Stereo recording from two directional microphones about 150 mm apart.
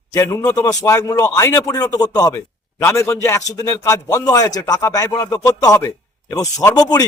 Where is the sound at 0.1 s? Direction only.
20° left (ahead or behind).